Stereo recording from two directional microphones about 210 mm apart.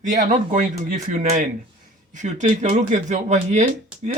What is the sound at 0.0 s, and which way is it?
Speech, 40° right (ahead or behind).